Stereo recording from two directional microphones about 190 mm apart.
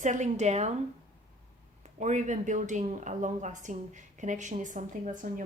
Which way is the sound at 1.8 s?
40° right (ahead or behind).